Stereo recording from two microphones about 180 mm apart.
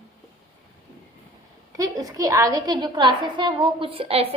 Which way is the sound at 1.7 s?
20° right (ahead or behind).